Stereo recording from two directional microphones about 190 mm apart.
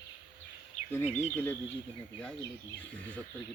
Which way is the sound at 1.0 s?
35° left (ahead or behind).